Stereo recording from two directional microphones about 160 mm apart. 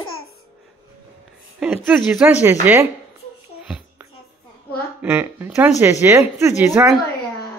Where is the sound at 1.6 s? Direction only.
10° right (ahead or behind).